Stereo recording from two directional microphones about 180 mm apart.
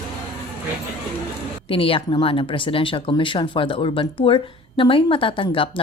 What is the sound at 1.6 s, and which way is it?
A woman's voice, 30° left (ahead or behind).